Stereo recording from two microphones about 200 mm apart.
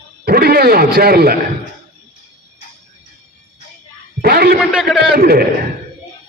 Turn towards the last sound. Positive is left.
turn(degrees=-50)  # may be behind; listen again after turning